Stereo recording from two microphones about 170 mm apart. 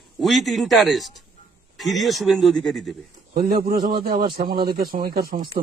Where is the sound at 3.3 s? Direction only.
60° right (ahead or behind).